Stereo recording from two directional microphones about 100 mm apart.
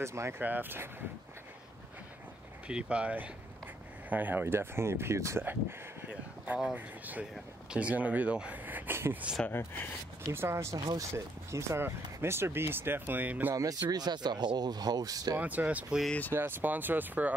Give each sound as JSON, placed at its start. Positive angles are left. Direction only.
{"t": 0.0, "sound": "speech", "side_deg": -30}
{"t": 2.7, "sound": "speech", "side_deg": -10}
{"t": 10.3, "sound": "speech", "side_deg": -25}
{"t": 13.6, "sound": "speech", "side_deg": -35}
{"t": 15.3, "sound": "speech", "side_deg": -15}
{"t": 16.1, "sound": "speech", "side_deg": 15}
{"t": 16.3, "sound": "speech", "side_deg": -20}